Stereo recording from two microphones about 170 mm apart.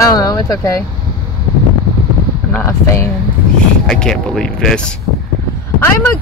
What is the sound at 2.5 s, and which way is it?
Speech, 15° left (ahead or behind).